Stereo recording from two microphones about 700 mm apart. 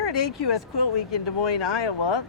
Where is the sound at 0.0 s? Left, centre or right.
Left.